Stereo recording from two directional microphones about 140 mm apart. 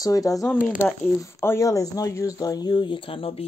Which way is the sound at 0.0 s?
25° left (ahead or behind).